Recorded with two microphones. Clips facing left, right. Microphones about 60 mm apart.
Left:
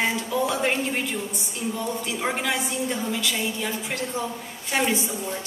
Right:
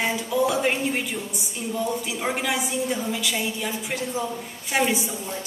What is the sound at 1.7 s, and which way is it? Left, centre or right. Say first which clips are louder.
A woman's voice: right 4 dB; centre.